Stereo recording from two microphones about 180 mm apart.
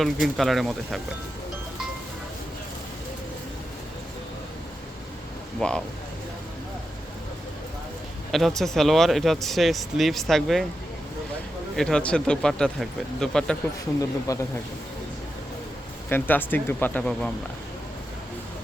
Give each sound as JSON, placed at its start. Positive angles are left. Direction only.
{"t": 0.0, "sound": "speech", "side_deg": 0}
{"t": 5.5, "sound": "speech", "side_deg": 5}
{"t": 8.3, "sound": "speech", "side_deg": 0}
{"t": 11.8, "sound": "speech", "side_deg": 5}
{"t": 14.3, "sound": "speech", "side_deg": 20}
{"t": 16.0, "sound": "speech", "side_deg": 10}